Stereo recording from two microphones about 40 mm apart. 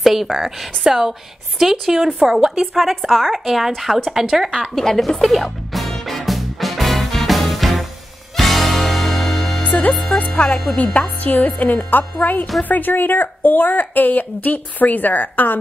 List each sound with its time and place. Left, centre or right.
0.0 s a woman's voice: centre
4.7 s music: centre
9.8 s music: left
10.8 s a woman's voice: left